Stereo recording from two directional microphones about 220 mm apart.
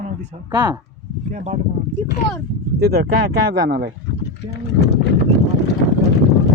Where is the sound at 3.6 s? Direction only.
45° right (ahead or behind).